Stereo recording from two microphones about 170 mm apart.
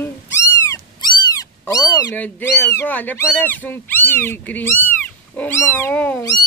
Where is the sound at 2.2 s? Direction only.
10° left (ahead or behind).